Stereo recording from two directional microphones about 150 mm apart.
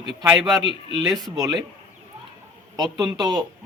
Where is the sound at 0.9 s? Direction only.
25° right (ahead or behind).